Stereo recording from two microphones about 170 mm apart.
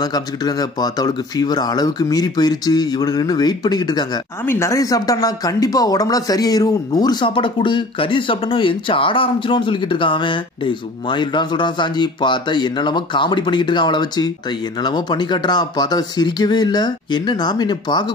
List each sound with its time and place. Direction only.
0.0 s speech: 25° left (ahead or behind)